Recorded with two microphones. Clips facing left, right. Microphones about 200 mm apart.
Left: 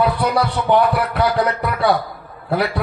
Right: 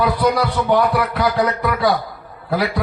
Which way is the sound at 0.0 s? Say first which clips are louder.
Right 1 dB; 30° left (ahead or behind).